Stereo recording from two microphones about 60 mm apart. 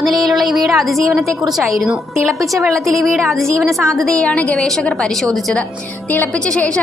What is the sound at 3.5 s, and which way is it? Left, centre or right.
Speech, right.